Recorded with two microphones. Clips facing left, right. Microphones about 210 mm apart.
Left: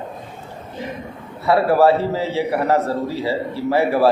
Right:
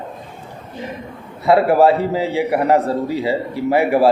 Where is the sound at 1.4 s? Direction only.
15° right (ahead or behind).